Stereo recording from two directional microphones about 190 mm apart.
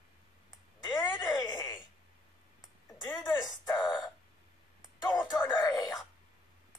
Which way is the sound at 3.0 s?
20° left (ahead or behind).